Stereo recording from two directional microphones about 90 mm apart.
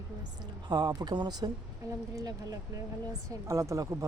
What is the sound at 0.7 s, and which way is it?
Speech, 50° right (ahead or behind).